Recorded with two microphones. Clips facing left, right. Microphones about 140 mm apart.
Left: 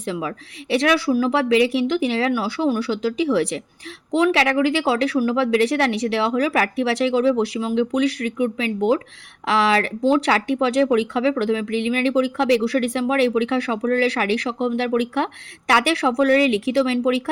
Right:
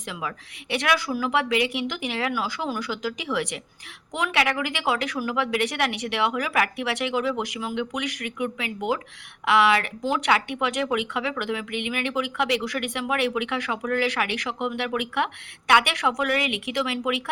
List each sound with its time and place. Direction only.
0.0 s a woman's voice: 30° left (ahead or behind)